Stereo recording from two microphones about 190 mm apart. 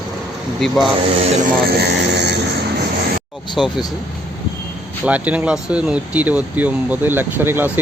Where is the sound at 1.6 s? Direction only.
60° right (ahead or behind).